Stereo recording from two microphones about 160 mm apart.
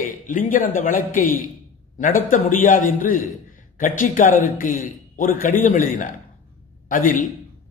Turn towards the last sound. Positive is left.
turn(degrees=60)  # may be behind; listen again after turning